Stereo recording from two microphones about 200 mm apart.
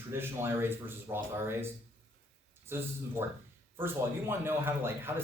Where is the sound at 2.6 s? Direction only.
10° right (ahead or behind).